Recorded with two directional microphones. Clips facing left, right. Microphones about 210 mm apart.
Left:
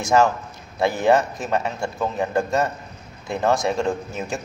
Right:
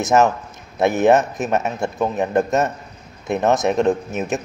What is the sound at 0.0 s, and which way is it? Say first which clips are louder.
Speech: right 2 dB; 20° right (ahead or behind).